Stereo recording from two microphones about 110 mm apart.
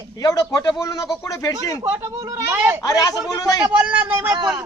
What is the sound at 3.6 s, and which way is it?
Speech, 15° right (ahead or behind).